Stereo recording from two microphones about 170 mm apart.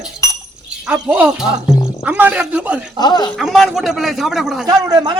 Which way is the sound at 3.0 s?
25° left (ahead or behind).